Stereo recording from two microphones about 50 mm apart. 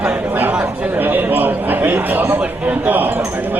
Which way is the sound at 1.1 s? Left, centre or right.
Right.